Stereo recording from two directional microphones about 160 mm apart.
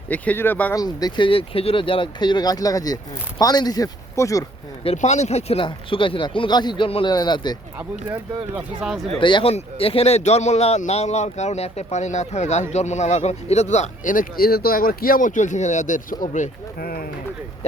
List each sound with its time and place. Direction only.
0.1 s speech: 10° left (ahead or behind)
0.8 s speech: 25° left (ahead or behind)
4.9 s speech: 45° left (ahead or behind); by 7.5 s 25° left (ahead or behind)
7.8 s speech: 10° right (ahead or behind)
9.1 s speech: 35° left (ahead or behind); by 16.5 s 55° left (ahead or behind)
16.8 s speech: 70° left (ahead or behind)